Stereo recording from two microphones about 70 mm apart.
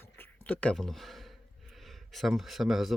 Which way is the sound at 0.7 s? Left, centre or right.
Centre.